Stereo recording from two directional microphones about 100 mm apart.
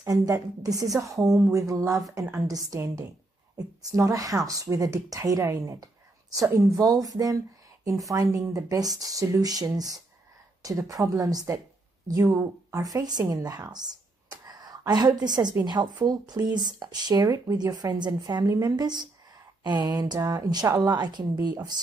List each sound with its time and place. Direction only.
0.0 s speech: 35° right (ahead or behind)